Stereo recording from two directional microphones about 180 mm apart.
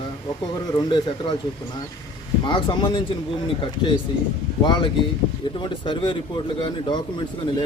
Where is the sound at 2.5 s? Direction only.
25° left (ahead or behind).